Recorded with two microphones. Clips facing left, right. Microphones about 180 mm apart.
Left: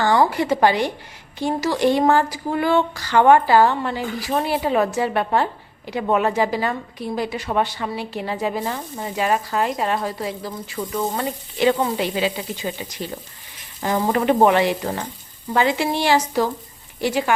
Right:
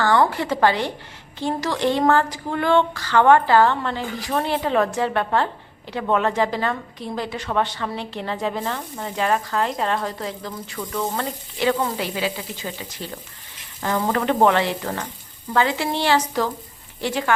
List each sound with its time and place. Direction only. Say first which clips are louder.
0.0 s a woman's voice: left 1 dB; 15° left (ahead or behind)
11.8 s sizzle: left 3 dB; 20° left (ahead or behind)
13.8 s speech: left 3 dB; 15° left (ahead or behind)